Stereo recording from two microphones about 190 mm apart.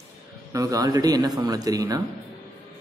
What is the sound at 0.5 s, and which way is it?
Speech, 20° right (ahead or behind).